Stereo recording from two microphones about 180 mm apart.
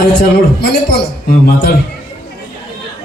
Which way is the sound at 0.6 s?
65° left (ahead or behind).